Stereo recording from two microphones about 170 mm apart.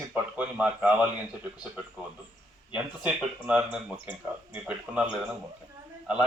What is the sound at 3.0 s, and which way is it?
A man's voice, 5° right (ahead or behind).